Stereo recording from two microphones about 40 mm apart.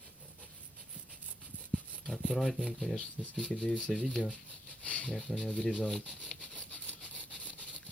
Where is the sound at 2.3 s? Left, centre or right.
Centre.